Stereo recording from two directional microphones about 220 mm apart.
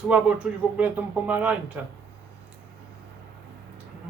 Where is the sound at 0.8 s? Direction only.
5° right (ahead or behind).